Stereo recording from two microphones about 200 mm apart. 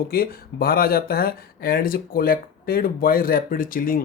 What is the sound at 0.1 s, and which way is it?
Speech, 50° left (ahead or behind).